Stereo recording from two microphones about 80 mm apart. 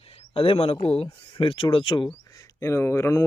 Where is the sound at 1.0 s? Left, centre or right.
Left.